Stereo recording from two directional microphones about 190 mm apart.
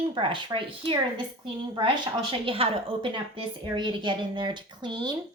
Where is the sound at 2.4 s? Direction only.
30° right (ahead or behind).